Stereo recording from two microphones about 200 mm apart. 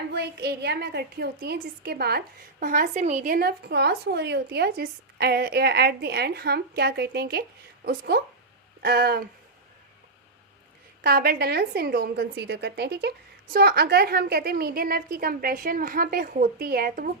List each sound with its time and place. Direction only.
0.1 s a woman's voice: 55° right (ahead or behind)
11.0 s a woman's voice: 50° right (ahead or behind)